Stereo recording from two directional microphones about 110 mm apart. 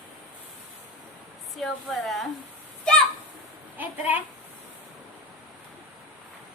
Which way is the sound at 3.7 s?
15° right (ahead or behind).